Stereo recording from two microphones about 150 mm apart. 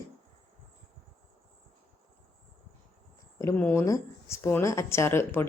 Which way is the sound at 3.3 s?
15° left (ahead or behind).